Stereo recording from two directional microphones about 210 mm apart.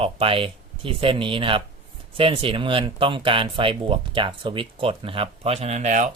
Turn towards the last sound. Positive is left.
turn(degrees=-35)  # may be behind; listen again after turning